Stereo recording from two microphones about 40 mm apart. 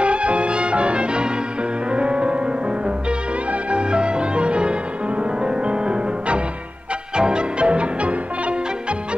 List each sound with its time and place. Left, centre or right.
0.0 s music: right
3.7 s music: right